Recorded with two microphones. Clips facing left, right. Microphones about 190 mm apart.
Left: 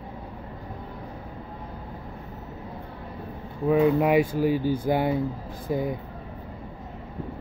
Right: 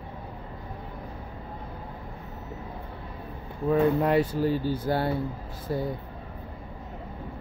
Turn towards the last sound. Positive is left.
turn(degrees=15)  # may be behind; listen again after turning